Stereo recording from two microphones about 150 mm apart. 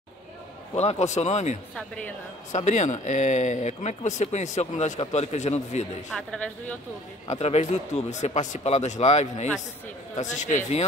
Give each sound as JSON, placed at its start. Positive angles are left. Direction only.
{"t": 0.7, "sound": "speech", "side_deg": 45}
{"t": 1.8, "sound": "speech", "side_deg": 10}
{"t": 2.5, "sound": "speech", "side_deg": 50}
{"t": 6.1, "sound": "speech", "side_deg": 5}
{"t": 7.2, "sound": "speech", "side_deg": 45}